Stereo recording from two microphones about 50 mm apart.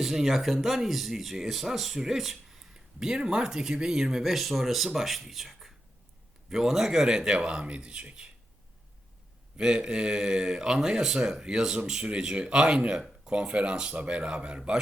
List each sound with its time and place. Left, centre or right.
0.0 s speech: centre
9.6 s speech: centre